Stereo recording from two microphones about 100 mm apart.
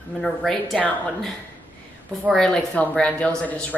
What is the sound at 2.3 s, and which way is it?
A woman's voice, 10° left (ahead or behind).